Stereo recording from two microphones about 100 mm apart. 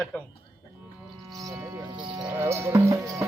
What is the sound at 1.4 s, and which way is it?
Music, 35° right (ahead or behind).